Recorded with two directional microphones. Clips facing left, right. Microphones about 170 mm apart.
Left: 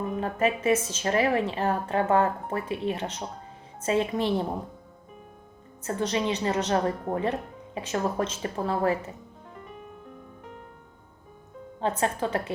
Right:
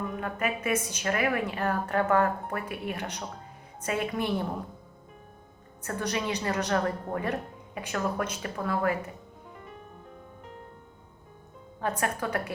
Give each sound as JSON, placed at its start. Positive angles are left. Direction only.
{"t": 0.0, "sound": "a woman's voice", "side_deg": 30}
{"t": 5.8, "sound": "a woman's voice", "side_deg": 20}
{"t": 11.8, "sound": "a woman's voice", "side_deg": 25}